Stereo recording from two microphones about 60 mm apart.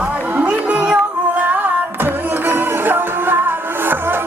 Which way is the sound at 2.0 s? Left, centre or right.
Right.